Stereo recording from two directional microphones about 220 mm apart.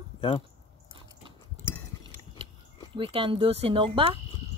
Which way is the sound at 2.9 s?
25° right (ahead or behind).